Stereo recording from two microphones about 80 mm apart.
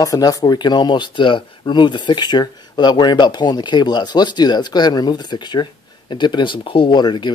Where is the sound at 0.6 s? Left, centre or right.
Left.